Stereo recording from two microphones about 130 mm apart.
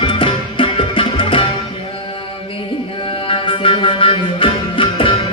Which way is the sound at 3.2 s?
45° left (ahead or behind).